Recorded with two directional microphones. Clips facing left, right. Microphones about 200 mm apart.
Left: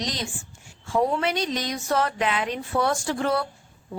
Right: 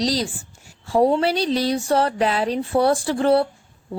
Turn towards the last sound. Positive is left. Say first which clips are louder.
# right 7 dB
turn(degrees=-30)  # may be behind; listen again after turning